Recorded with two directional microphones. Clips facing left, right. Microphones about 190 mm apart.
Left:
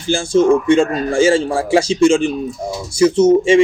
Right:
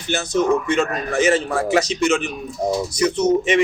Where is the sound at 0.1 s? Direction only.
30° left (ahead or behind).